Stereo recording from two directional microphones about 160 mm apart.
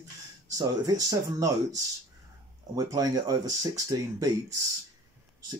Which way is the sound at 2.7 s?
25° right (ahead or behind).